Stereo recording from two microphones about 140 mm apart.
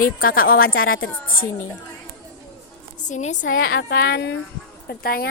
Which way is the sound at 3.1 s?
60° left (ahead or behind).